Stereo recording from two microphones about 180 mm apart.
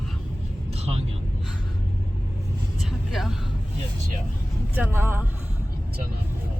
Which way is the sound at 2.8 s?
Centre (ahead or behind).